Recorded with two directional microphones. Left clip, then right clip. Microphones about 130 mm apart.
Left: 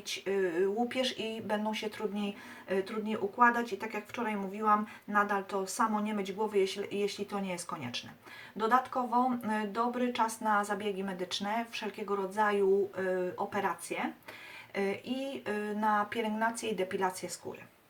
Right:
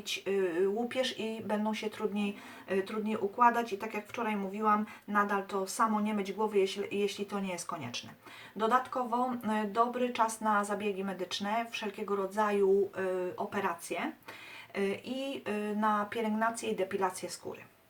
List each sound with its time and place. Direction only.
0.3 s speech: 5° left (ahead or behind)